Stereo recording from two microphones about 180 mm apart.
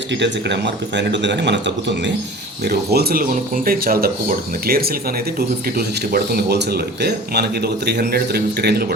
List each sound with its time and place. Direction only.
0.1 s speech: 75° right (ahead or behind)
2.6 s speech: 60° right (ahead or behind)